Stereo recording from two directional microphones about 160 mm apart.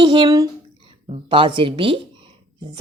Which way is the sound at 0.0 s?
30° right (ahead or behind).